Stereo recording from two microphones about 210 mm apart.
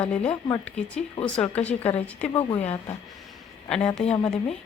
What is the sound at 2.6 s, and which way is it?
Speech, 30° left (ahead or behind).